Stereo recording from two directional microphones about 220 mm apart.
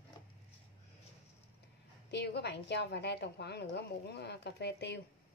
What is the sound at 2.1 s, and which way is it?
A woman's voice, 50° left (ahead or behind).